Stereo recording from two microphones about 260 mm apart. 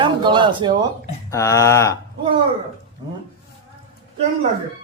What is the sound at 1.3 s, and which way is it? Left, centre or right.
Speech, centre.